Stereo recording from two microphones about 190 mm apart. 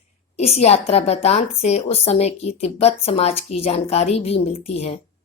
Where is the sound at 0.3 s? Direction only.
35° left (ahead or behind).